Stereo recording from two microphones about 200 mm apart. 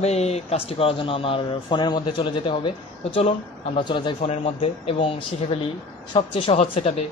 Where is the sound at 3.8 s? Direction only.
25° left (ahead or behind).